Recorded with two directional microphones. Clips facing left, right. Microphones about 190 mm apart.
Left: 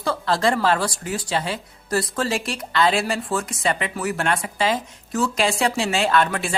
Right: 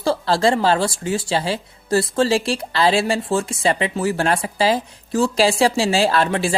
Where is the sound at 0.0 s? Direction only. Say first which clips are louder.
Right 4 dB; 30° right (ahead or behind).